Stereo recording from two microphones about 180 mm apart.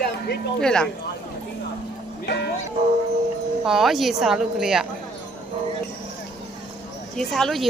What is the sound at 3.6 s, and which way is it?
A woman's voice, centre (ahead or behind).